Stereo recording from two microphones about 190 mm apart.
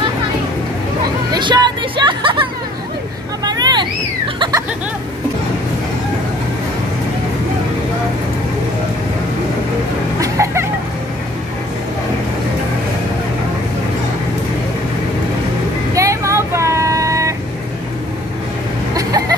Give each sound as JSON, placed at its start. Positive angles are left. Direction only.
{"t": 1.3, "sound": "hubbub", "side_deg": -25}
{"t": 3.4, "sound": "vehicle", "side_deg": -20}
{"t": 4.4, "sound": "a sound", "side_deg": -20}
{"t": 10.2, "sound": "a sound", "side_deg": -15}
{"t": 15.9, "sound": "vehicle", "side_deg": -15}
{"t": 18.9, "sound": "vehicle", "side_deg": -20}